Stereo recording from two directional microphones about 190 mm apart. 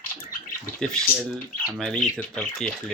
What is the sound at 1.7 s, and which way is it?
Speech, 5° left (ahead or behind).